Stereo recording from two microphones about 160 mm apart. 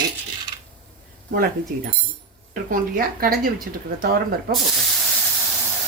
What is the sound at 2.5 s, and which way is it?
Speech, 65° right (ahead or behind).